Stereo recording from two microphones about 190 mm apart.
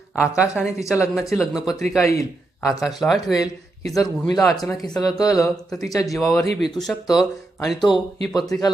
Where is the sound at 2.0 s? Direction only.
15° left (ahead or behind).